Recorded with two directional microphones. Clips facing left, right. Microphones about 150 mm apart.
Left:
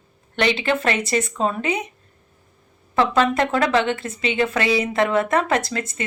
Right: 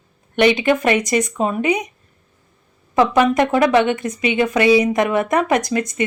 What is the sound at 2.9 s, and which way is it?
Speech, 15° right (ahead or behind).